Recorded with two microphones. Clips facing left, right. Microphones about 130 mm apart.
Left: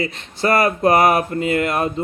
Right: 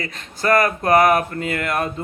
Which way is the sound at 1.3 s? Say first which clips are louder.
Left 5 dB; 25° left (ahead or behind).